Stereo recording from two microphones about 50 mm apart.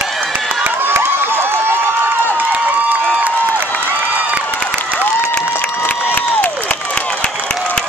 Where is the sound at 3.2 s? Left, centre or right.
Right.